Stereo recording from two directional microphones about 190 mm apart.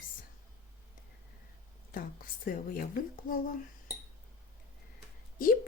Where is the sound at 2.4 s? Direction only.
50° left (ahead or behind).